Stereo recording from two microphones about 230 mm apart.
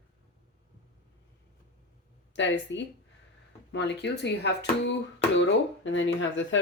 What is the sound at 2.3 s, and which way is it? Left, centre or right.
Speech, left.